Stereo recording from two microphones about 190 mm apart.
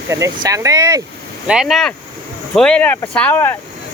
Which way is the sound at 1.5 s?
Centre (ahead or behind).